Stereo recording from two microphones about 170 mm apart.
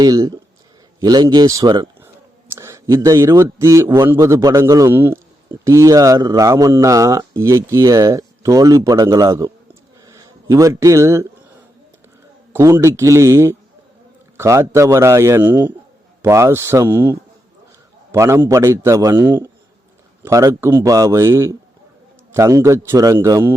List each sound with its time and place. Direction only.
0.0 s a man's voice: 20° right (ahead or behind)
12.5 s a man's voice: 15° right (ahead or behind)